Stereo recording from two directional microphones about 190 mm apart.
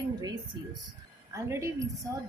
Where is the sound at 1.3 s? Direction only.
15° right (ahead or behind).